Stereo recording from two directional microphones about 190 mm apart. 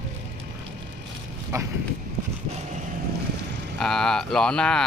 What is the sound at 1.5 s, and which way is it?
Speech, 15° right (ahead or behind).